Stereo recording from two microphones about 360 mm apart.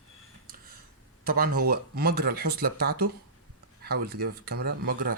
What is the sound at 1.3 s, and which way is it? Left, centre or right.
Speech, right.